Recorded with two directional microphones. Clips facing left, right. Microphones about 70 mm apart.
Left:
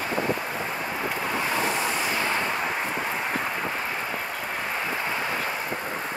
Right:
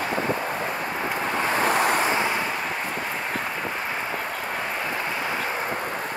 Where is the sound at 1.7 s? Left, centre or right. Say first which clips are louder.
Right 6 dB; right.